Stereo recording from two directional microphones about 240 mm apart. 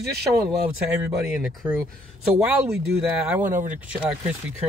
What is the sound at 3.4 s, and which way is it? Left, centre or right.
Speech, right.